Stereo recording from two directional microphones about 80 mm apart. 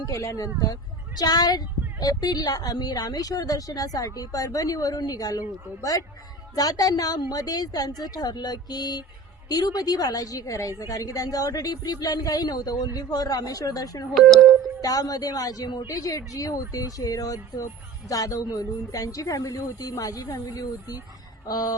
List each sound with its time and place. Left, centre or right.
0.1 s a woman's voice: left
14.1 s speech: centre
14.8 s a woman's voice: left